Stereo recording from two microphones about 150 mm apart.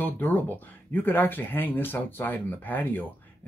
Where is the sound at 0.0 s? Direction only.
15° left (ahead or behind).